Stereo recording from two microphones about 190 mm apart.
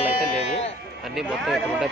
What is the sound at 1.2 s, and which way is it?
Speech, 5° right (ahead or behind).